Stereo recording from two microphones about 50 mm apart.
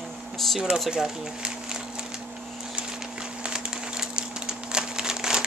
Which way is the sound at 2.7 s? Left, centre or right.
Centre.